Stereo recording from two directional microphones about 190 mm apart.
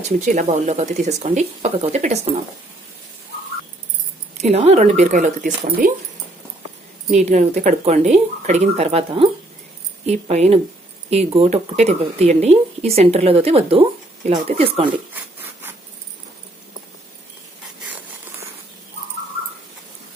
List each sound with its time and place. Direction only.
0.0 s speech: 40° right (ahead or behind)
4.4 s speech: 35° right (ahead or behind)
7.2 s speech: 35° right (ahead or behind)